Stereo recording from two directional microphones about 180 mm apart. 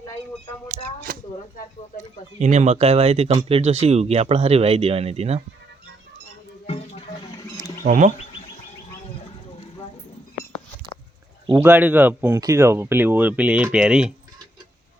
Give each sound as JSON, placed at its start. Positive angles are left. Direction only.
{"t": 0.7, "sound": "speech", "side_deg": -50}
{"t": 2.4, "sound": "speech", "side_deg": -40}
{"t": 6.7, "sound": "a sound", "side_deg": 35}
{"t": 7.4, "sound": "insect", "side_deg": 15}
{"t": 7.9, "sound": "speech", "side_deg": -45}
{"t": 11.5, "sound": "speech", "side_deg": -10}